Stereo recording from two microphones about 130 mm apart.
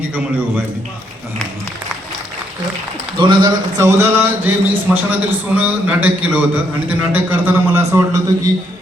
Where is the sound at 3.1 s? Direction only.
35° right (ahead or behind).